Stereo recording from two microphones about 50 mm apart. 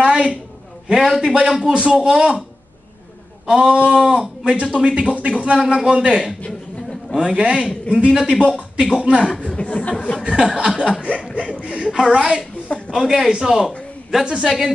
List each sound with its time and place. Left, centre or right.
0.0 s a sound: centre
0.8 s a man's voice: centre
1.7 s a man's voice: centre
3.4 s a man's voice: centre
7.6 s speech: left
8.1 s a man's voice: centre
9.5 s speech: left
10.1 s a man's voice: centre
12.6 s a sound: left
12.9 s a man's voice: centre